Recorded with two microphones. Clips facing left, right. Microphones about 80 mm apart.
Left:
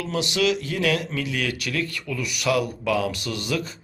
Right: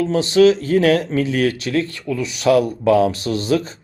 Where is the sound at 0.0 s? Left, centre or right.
Right.